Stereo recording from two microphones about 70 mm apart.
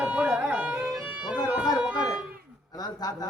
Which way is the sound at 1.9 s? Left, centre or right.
Left.